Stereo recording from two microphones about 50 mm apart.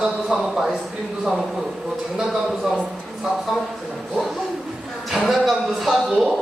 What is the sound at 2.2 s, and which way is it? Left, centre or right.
Speech, centre.